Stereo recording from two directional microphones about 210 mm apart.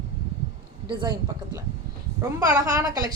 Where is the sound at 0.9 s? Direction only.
20° right (ahead or behind).